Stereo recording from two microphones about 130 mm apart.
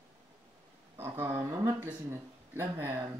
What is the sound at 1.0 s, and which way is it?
Speech, 15° right (ahead or behind).